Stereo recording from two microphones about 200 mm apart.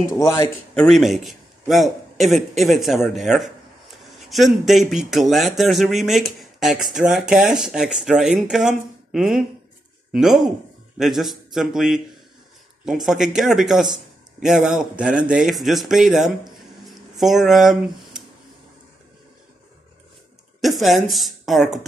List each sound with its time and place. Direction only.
0.1 s speech: 15° left (ahead or behind)
0.7 s a man's voice: centre (ahead or behind)
16.5 s a sound: centre (ahead or behind)
20.6 s speech: centre (ahead or behind)